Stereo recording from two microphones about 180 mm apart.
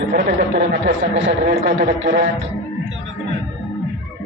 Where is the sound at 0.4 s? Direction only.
90° right.